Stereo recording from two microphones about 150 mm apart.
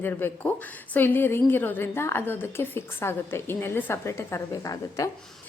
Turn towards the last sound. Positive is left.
turn(degrees=20)  # may be behind; listen again after turning